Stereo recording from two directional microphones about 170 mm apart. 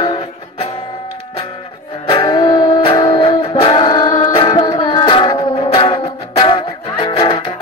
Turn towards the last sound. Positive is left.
turn(degrees=30)  # may be behind; listen again after turning